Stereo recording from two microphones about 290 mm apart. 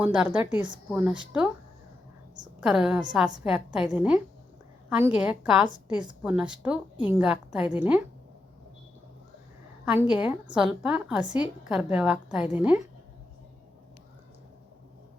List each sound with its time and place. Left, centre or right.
0.0 s a woman's voice: centre
2.6 s a woman's voice: centre
9.8 s a woman's voice: centre